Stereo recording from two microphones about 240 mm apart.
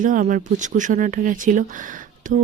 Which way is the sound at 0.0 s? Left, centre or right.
Right.